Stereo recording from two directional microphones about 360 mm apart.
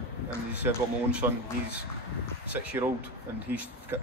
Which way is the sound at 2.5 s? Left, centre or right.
Centre.